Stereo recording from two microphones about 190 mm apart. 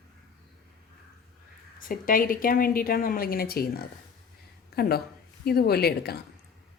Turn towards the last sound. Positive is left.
turn(degrees=55)  # may be behind; listen again after turning